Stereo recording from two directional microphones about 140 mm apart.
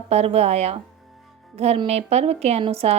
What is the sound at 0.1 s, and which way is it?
A woman's voice, 50° right (ahead or behind).